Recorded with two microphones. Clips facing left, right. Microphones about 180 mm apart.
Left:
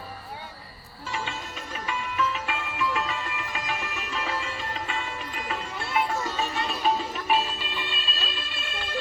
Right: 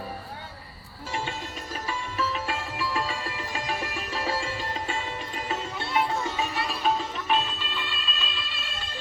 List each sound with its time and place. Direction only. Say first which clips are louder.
1.1 s music: right 1 dB; 40° right (ahead or behind)
5.8 s music: even; 15° right (ahead or behind)
6.8 s music: left 1 dB; centre (ahead or behind)
8.1 s music: left 1 dB; 40° left (ahead or behind)